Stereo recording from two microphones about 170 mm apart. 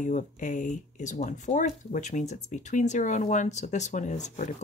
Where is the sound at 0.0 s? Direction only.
50° left (ahead or behind).